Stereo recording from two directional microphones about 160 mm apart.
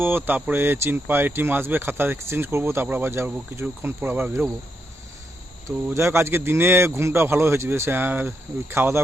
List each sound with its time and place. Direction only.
0.0 s speech: 10° right (ahead or behind)
5.6 s speech: 15° right (ahead or behind)